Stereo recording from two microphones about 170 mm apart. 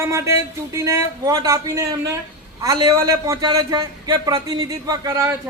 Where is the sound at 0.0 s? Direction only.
15° right (ahead or behind).